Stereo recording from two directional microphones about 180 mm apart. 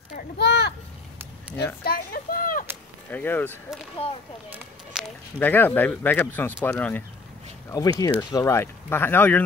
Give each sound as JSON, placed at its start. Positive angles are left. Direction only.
{"t": 0.1, "sound": "speech", "side_deg": 65}
{"t": 1.9, "sound": "speech", "side_deg": 55}
{"t": 3.1, "sound": "speech", "side_deg": 10}
{"t": 4.0, "sound": "speech", "side_deg": 35}
{"t": 4.9, "sound": "speech", "side_deg": -5}
{"t": 5.4, "sound": "speech", "side_deg": 10}
{"t": 8.0, "sound": "speech", "side_deg": 20}